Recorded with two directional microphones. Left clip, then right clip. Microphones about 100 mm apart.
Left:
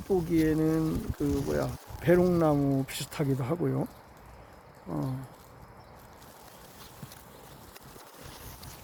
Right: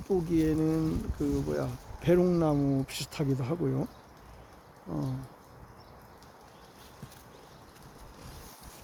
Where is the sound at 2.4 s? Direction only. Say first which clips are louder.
Left 3 dB; 20° left (ahead or behind).